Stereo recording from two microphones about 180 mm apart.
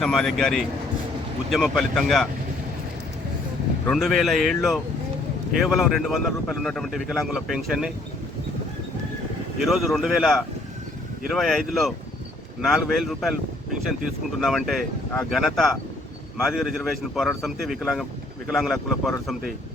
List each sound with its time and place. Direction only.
0.0 s a man's voice: centre (ahead or behind)
3.8 s a man's voice: centre (ahead or behind)
9.6 s a man's voice: centre (ahead or behind)
14.4 s a man's voice: centre (ahead or behind)